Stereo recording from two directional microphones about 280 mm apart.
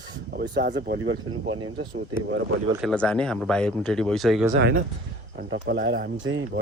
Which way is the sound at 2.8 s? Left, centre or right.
Centre.